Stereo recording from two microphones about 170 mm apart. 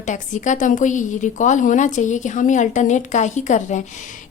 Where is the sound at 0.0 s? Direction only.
45° left (ahead or behind).